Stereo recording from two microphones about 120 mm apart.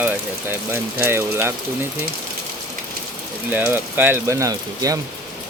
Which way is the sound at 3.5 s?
15° right (ahead or behind).